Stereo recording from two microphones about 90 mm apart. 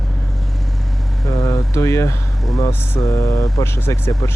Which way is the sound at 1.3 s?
40° left (ahead or behind).